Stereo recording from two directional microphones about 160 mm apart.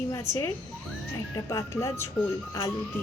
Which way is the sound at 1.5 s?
20° left (ahead or behind).